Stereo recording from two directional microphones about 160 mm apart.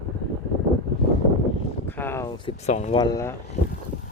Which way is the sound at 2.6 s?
45° left (ahead or behind).